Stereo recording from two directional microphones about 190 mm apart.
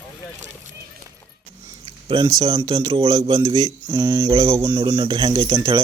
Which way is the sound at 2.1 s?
25° right (ahead or behind).